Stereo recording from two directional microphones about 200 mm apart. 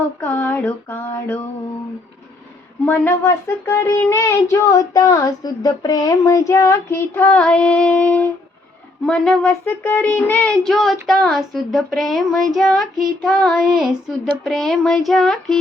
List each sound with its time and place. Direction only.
0.2 s child singing: 10° left (ahead or behind)
2.8 s child singing: 10° left (ahead or behind)